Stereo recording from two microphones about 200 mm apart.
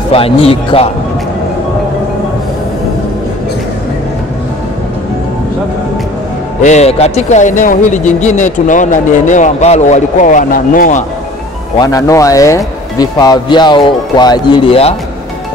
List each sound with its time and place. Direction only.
0.1 s speech: 30° left (ahead or behind)
6.6 s speech: 35° left (ahead or behind)
11.8 s speech: 15° left (ahead or behind)